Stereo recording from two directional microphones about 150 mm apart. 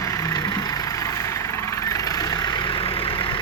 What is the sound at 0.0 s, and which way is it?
Vehicle, 20° left (ahead or behind).